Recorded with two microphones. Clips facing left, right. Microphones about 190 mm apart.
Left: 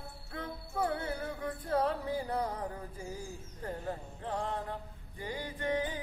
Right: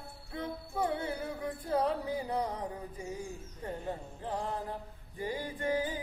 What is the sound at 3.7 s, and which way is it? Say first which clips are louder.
Music: even; centre (ahead or behind).